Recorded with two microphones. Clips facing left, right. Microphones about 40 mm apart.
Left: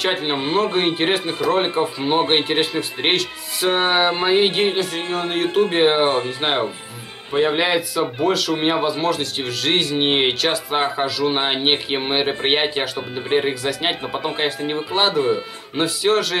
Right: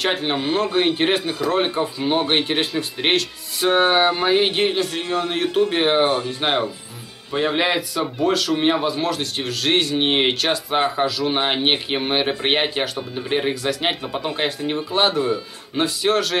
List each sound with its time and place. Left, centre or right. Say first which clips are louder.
0.0 s a man's voice: even; centre
6.0 s speech: left 1 dB; left
7.3 s a man's voice: left 2 dB; centre
14.6 s speech: even; centre
15.0 s a man's voice: left 1 dB; centre